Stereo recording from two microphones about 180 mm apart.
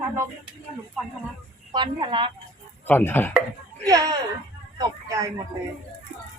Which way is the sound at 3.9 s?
20° right (ahead or behind).